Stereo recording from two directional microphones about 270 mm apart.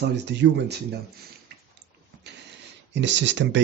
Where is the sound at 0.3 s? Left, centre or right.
Right.